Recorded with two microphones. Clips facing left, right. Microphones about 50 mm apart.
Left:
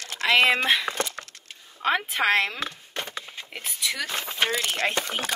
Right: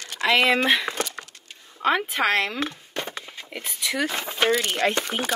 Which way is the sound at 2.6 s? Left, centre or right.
Right.